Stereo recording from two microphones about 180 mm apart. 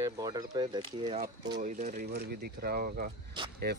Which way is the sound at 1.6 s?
40° right (ahead or behind).